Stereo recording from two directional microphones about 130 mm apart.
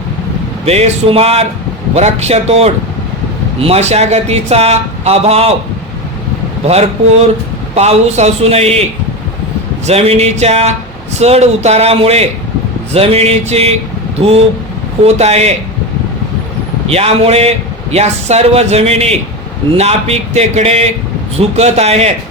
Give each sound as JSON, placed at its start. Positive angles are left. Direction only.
{"t": 0.6, "sound": "speech", "side_deg": -50}
{"t": 7.8, "sound": "speech", "side_deg": -55}
{"t": 9.8, "sound": "a man's voice", "side_deg": -50}
{"t": 16.9, "sound": "a man's voice", "side_deg": -50}